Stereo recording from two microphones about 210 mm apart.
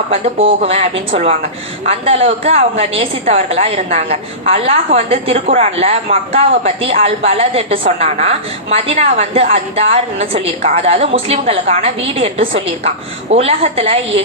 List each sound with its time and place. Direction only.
0.1 s a woman's voice: 25° right (ahead or behind)
7.3 s a woman's voice: 30° right (ahead or behind)